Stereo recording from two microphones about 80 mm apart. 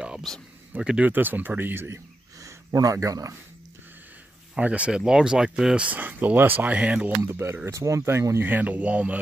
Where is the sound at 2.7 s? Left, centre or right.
Right.